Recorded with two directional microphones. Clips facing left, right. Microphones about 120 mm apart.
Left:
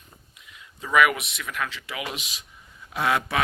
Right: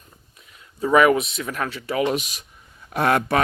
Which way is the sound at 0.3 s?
40° right (ahead or behind).